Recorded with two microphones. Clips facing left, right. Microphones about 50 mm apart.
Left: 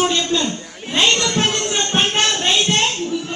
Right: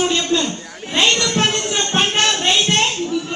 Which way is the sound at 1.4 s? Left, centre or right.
Left.